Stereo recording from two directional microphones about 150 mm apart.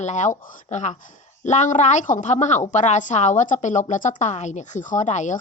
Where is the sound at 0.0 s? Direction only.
55° left (ahead or behind).